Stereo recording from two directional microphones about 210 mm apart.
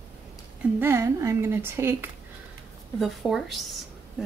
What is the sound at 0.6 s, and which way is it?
A woman's voice, 10° right (ahead or behind).